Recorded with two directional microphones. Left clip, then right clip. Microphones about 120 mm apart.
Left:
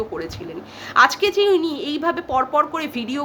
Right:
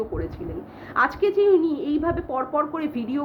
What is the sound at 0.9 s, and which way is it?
A woman's voice, 20° left (ahead or behind).